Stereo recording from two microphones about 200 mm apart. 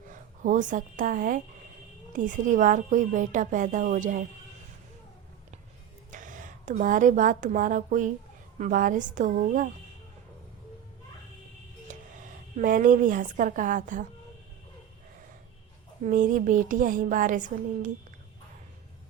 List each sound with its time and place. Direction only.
0.1 s speech: 40° right (ahead or behind)
6.1 s a woman's voice: 40° right (ahead or behind)
11.9 s a woman's voice: 40° right (ahead or behind)
16.0 s speech: 40° right (ahead or behind)